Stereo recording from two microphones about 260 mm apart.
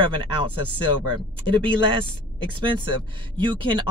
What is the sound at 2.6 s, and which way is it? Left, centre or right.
Speech, centre.